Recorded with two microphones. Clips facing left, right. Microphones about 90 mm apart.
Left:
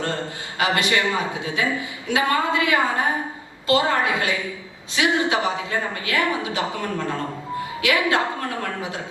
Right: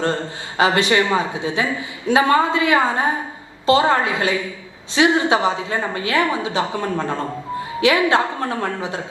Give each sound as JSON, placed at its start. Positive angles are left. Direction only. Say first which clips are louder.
{"t": 0.5, "sound": "a woman's voice", "louder": "right 5 dB", "side_deg": -25}